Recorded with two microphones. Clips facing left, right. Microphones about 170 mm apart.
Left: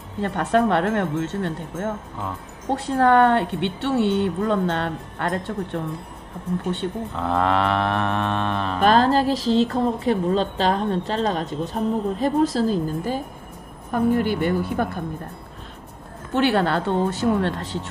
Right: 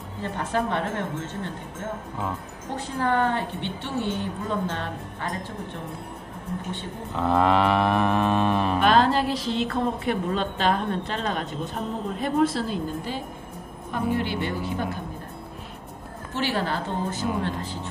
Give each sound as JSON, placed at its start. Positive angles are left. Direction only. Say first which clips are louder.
{"t": 0.2, "sound": "a woman's voice", "louder": "left 7 dB", "side_deg": 70}
{"t": 7.2, "sound": "mantra", "louder": "right 1 dB", "side_deg": 0}
{"t": 8.8, "sound": "a woman's voice", "louder": "left 4 dB", "side_deg": 45}
{"t": 16.3, "sound": "a woman's voice", "louder": "left 7 dB", "side_deg": 60}